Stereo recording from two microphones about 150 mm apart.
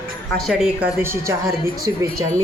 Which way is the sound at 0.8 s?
15° right (ahead or behind).